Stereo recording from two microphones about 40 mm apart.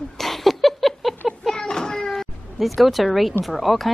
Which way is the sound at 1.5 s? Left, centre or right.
Centre.